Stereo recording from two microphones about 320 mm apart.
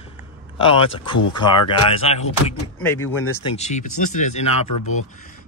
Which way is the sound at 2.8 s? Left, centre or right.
Centre.